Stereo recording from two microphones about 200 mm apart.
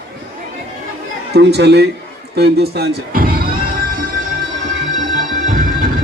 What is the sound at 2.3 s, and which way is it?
Music, 55° right (ahead or behind).